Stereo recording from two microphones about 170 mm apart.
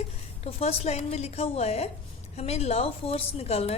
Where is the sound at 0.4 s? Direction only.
35° left (ahead or behind).